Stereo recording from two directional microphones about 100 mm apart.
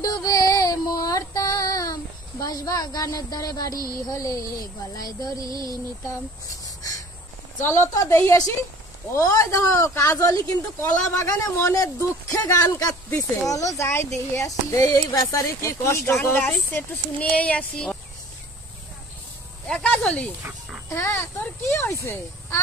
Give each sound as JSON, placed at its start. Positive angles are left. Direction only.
{"t": 0.0, "sound": "music", "side_deg": 40}
{"t": 2.4, "sound": "a woman's voice", "side_deg": 40}
{"t": 6.8, "sound": "a sound", "side_deg": 35}
{"t": 7.6, "sound": "a woman's voice", "side_deg": 25}
{"t": 19.7, "sound": "snake", "side_deg": 10}
{"t": 20.9, "sound": "speech", "side_deg": 30}